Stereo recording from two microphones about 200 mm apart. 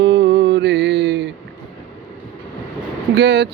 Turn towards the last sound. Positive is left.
turn(degrees=-60)  # may be behind; listen again after turning